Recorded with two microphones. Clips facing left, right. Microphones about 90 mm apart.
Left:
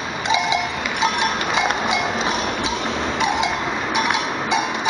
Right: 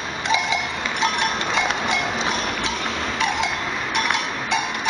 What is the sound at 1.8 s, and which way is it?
Music, centre (ahead or behind).